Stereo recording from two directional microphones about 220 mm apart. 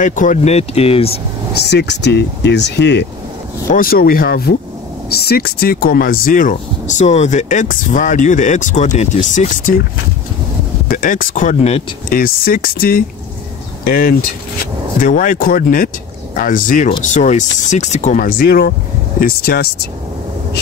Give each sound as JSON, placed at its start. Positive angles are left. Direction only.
{"t": 0.0, "sound": "speech", "side_deg": 35}
{"t": 1.6, "sound": "speech", "side_deg": 50}
{"t": 10.9, "sound": "speech", "side_deg": 40}